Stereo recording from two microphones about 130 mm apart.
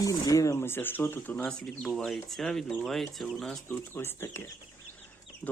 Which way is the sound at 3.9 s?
15° left (ahead or behind).